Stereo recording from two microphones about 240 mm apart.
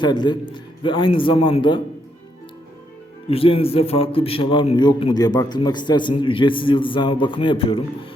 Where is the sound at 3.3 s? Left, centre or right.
Left.